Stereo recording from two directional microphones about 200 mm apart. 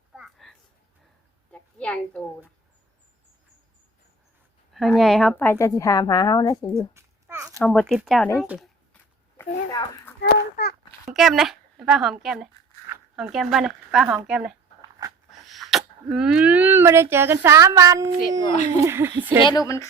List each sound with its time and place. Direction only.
0.1 s a sound: centre (ahead or behind)
1.8 s a woman's voice: 5° left (ahead or behind)
4.7 s a woman's voice: centre (ahead or behind); by 6.7 s 20° left (ahead or behind)
6.7 s babbling: 15° right (ahead or behind)
7.6 s speech: 5° left (ahead or behind)
8.4 s a sound: centre (ahead or behind)
9.4 s a sound: 15° left (ahead or behind)
10.2 s a sound: 55° left (ahead or behind)
11.1 s speech: centre (ahead or behind)
14.8 s dog: 20° right (ahead or behind)
15.3 s speech: centre (ahead or behind)
19.4 s a woman's voice: 20° left (ahead or behind)